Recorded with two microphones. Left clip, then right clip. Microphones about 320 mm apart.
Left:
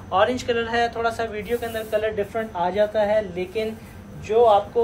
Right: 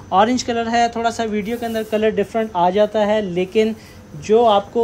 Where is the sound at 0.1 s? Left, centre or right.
Right.